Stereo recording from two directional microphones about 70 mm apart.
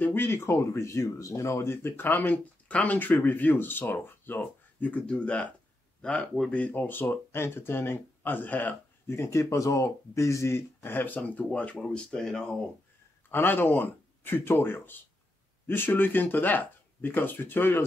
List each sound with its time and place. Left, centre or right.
0.0 s speech: left
9.0 s speech: left; by 12.5 s centre
13.3 s speech: left